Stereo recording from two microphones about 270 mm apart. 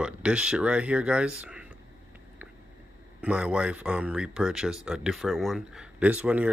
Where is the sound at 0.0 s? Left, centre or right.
Centre.